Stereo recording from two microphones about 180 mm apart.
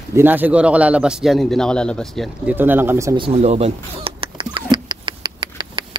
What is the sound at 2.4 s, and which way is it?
Speech, 10° right (ahead or behind).